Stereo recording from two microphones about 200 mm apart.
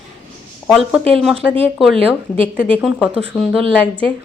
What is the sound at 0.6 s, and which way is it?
Speech, centre (ahead or behind).